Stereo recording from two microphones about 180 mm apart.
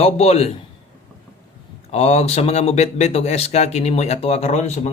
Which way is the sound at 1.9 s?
35° left (ahead or behind).